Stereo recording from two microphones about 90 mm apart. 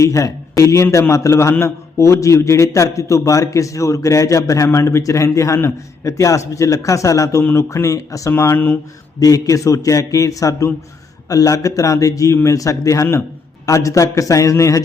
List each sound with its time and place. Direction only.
0.0 s a man's voice: 35° left (ahead or behind)
8.3 s speech: 25° left (ahead or behind)
9.2 s a man's voice: 40° left (ahead or behind)